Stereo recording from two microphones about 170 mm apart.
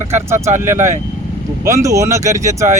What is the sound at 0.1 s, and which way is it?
Speech, 15° right (ahead or behind).